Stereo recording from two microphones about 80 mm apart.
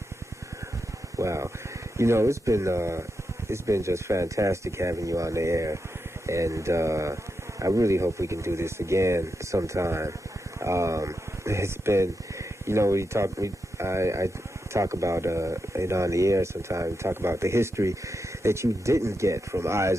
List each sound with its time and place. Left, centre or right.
1.1 s speech: right